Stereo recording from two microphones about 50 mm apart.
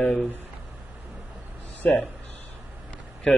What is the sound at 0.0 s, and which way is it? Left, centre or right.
Speech, centre.